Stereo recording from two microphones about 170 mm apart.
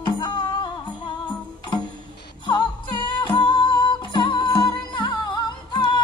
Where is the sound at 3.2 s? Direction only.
30° left (ahead or behind).